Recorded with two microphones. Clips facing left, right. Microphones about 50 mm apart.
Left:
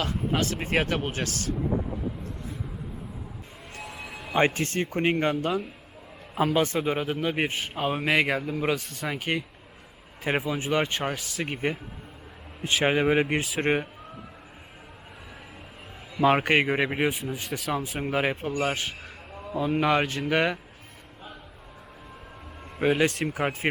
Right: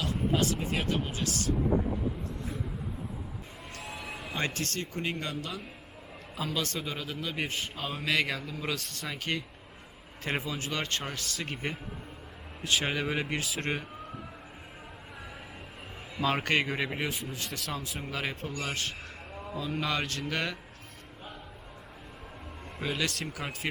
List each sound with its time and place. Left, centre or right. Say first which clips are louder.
0.0 s speech: left 2 dB; left
3.8 s a sound: left 2 dB; centre
4.4 s a man's voice: left 10 dB; left
8.7 s speech: left 7 dB; centre
12.6 s a man's voice: left 7 dB; left
16.4 s speech: left 6 dB; left
18.0 s speech: left 11 dB; left
18.7 s speech: left 4 dB; centre
19.5 s speech: left 9 dB; left
22.8 s a man's voice: left 9 dB; left